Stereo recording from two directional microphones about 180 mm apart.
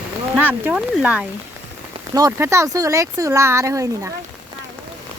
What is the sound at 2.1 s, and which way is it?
Speech, 20° right (ahead or behind).